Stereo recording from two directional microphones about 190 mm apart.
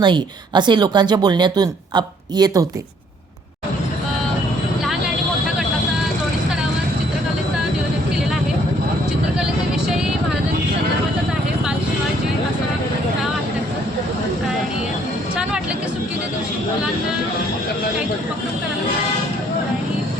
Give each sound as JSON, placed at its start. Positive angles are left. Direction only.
{"t": 0.0, "sound": "a woman's voice", "side_deg": -25}